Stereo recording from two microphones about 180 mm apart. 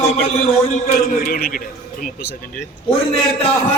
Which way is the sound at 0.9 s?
55° left (ahead or behind).